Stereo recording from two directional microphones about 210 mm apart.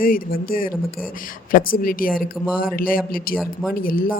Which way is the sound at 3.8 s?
45° left (ahead or behind).